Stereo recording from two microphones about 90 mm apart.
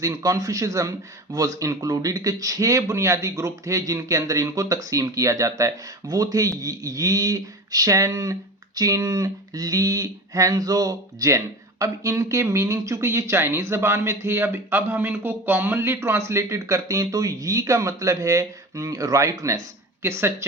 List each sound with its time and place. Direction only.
0.0 s speech: 40° right (ahead or behind)